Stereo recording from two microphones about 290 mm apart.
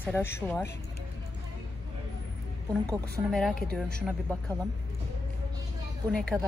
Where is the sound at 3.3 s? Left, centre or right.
Centre.